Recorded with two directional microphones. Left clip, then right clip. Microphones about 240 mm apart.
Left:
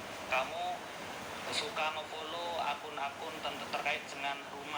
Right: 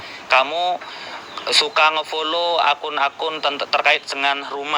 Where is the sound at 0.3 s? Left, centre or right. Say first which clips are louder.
Right 18 dB; right.